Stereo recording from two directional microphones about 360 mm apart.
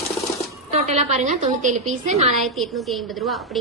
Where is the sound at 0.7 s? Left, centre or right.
Centre.